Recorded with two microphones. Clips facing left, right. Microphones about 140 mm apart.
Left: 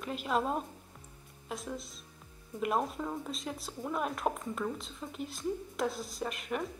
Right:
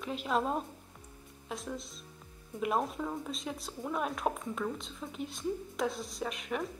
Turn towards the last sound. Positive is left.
turn(degrees=0)  # may be behind; listen again after turning